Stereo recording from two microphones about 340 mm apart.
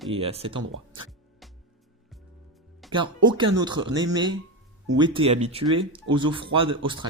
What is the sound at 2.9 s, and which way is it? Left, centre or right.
Speech, centre.